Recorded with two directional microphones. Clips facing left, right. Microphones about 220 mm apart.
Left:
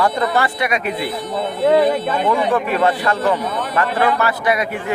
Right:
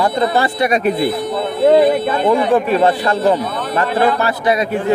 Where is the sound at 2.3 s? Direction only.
30° right (ahead or behind).